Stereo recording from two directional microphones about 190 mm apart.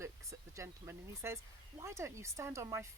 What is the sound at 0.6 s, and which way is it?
Speech, 15° right (ahead or behind).